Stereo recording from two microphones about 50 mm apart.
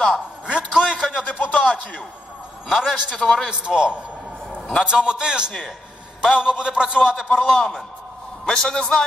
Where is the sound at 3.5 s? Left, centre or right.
Centre.